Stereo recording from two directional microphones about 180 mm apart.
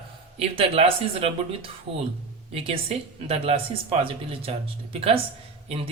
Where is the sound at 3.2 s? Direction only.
35° right (ahead or behind).